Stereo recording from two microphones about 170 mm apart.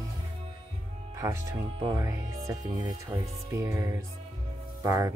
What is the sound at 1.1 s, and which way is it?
Speech, 20° right (ahead or behind).